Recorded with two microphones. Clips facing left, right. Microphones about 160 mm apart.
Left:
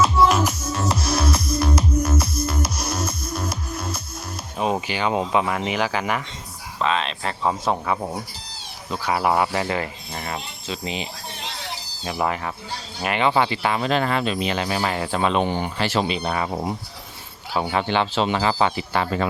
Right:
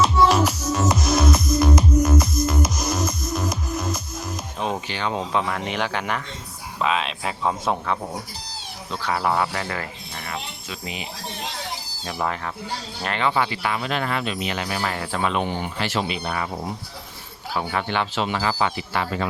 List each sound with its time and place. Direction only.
0.0 s music: 5° left (ahead or behind)
0.3 s music: 10° right (ahead or behind)
4.7 s speech: 10° left (ahead or behind)
10.2 s speech: 30° left (ahead or behind)
12.0 s speech: 10° left (ahead or behind); by 19.3 s 35° left (ahead or behind)